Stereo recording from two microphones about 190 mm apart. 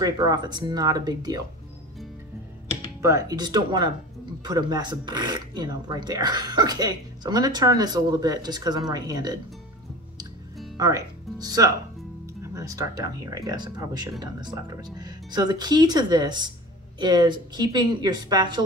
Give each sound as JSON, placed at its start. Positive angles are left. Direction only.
{"t": 0.0, "sound": "speech", "side_deg": -20}
{"t": 3.0, "sound": "speech", "side_deg": -15}
{"t": 10.8, "sound": "speech", "side_deg": -20}